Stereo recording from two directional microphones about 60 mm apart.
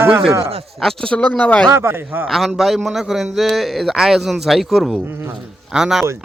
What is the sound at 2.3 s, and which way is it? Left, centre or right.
A man's voice, centre.